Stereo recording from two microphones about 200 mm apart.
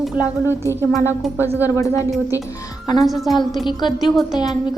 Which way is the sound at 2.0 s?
15° left (ahead or behind).